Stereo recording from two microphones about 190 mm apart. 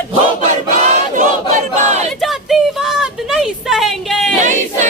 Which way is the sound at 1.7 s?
40° right (ahead or behind).